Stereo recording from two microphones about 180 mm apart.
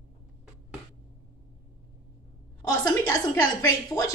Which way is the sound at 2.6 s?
20° left (ahead or behind).